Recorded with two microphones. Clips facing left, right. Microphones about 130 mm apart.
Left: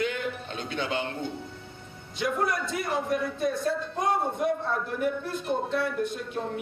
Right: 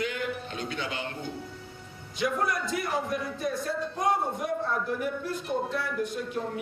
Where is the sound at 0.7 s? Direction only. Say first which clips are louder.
Left 7 dB; 25° left (ahead or behind).